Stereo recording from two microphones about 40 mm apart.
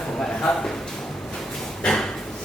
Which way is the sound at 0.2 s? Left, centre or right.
Centre.